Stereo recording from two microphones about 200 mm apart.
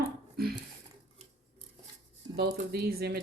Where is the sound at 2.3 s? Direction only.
55° right (ahead or behind).